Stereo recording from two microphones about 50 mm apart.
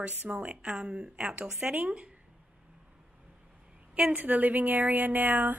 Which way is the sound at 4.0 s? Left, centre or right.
Right.